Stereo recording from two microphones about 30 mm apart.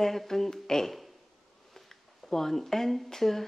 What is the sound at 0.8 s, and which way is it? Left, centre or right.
Speech, centre.